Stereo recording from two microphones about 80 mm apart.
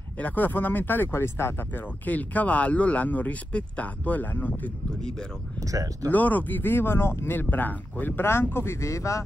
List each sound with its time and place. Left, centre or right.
0.2 s speech: left
5.6 s speech: right
6.0 s speech: left